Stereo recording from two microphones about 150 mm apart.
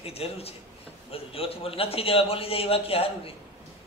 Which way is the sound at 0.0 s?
40° left (ahead or behind).